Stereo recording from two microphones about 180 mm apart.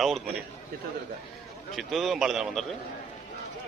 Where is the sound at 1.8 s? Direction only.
Centre (ahead or behind).